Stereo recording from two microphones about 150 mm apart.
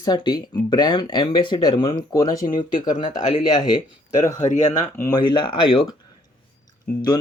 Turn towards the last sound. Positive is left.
turn(degrees=25)  # may be behind; listen again after turning